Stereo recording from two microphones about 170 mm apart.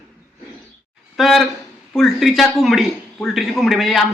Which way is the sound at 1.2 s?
Centre (ahead or behind).